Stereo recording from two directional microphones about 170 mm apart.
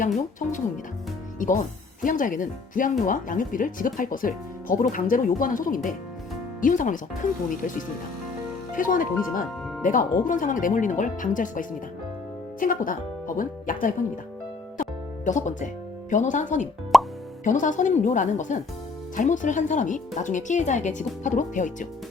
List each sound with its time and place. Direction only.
0.0 s speech: 50° left (ahead or behind)
8.7 s speech: 55° left (ahead or behind)
14.8 s music: 45° left (ahead or behind)
16.9 s plop: centre (ahead or behind)
17.4 s speech: 50° left (ahead or behind)